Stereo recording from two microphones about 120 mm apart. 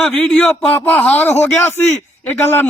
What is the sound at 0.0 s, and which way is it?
A man's voice, 5° left (ahead or behind).